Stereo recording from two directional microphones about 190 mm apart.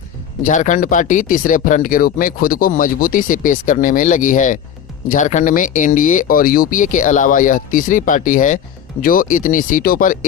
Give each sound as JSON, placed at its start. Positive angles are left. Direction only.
{"t": 0.4, "sound": "speech", "side_deg": 40}